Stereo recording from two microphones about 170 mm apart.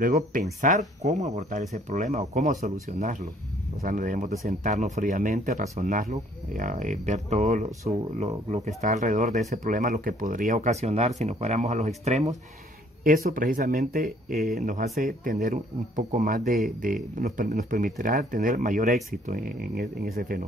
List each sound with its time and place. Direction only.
0.0 s speech: 50° right (ahead or behind)
3.8 s speech: 50° right (ahead or behind)
13.0 s speech: 55° right (ahead or behind)